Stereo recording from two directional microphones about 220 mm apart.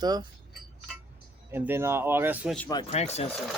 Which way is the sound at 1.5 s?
10° right (ahead or behind).